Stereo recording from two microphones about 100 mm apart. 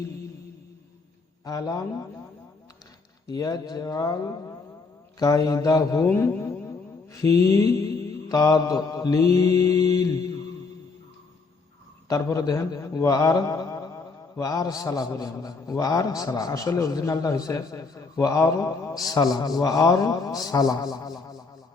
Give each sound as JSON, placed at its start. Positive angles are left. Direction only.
{"t": 1.5, "sound": "a man's voice", "side_deg": 35}
{"t": 3.2, "sound": "a man's voice", "side_deg": 40}
{"t": 6.1, "sound": "a sound", "side_deg": 25}
{"t": 7.1, "sound": "a man's voice", "side_deg": 35}
{"t": 12.0, "sound": "a man's voice", "side_deg": 35}
{"t": 19.0, "sound": "a man's voice", "side_deg": 40}